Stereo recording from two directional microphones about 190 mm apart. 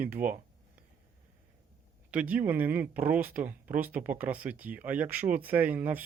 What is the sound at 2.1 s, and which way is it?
Speech, 5° right (ahead or behind).